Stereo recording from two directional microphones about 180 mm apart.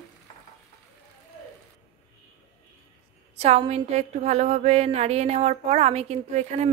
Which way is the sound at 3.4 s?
35° right (ahead or behind).